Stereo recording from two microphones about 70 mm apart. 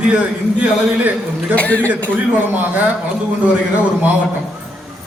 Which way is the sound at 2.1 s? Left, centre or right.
Right.